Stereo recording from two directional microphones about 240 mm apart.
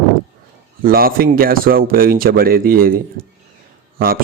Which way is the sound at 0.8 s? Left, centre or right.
Right.